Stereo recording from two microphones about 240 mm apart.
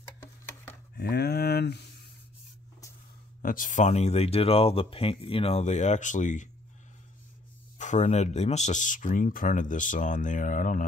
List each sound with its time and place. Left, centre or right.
0.9 s a sound: left
3.4 s speech: left
7.8 s speech: left